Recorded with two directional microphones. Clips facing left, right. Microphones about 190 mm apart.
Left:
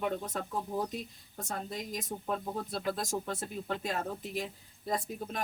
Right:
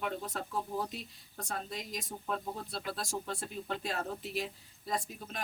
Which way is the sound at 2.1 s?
45° left (ahead or behind).